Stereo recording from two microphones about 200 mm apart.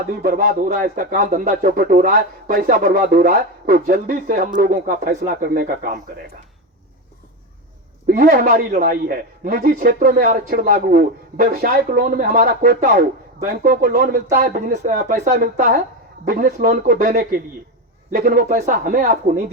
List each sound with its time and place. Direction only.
0.2 s a man's voice: 45° right (ahead or behind)
8.0 s a man's voice: 45° right (ahead or behind)